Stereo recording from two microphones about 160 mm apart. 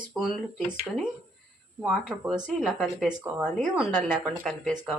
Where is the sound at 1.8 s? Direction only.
5° right (ahead or behind).